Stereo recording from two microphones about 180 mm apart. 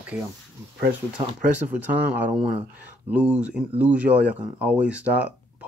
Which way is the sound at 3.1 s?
5° right (ahead or behind).